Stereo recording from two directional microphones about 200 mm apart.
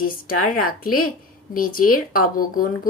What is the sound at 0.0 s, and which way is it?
Speech, 45° left (ahead or behind).